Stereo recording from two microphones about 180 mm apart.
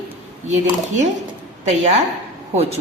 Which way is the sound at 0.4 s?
40° right (ahead or behind).